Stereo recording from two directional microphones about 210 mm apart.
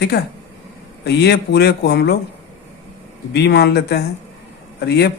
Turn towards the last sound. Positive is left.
turn(degrees=50)  # may be behind; listen again after turning